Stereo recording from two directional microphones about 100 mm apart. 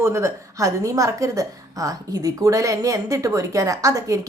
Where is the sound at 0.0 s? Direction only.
30° right (ahead or behind).